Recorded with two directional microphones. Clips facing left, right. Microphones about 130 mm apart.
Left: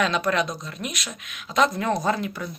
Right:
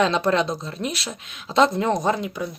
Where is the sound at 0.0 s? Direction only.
30° right (ahead or behind).